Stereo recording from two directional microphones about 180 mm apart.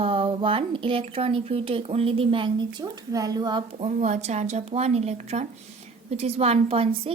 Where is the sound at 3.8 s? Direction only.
40° right (ahead or behind).